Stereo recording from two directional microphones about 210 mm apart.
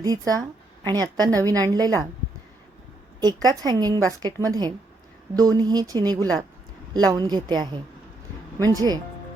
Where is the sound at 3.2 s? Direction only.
20° right (ahead or behind).